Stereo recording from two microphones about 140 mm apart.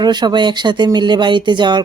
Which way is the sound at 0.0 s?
30° right (ahead or behind).